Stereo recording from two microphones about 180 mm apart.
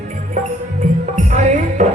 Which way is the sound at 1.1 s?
45° right (ahead or behind).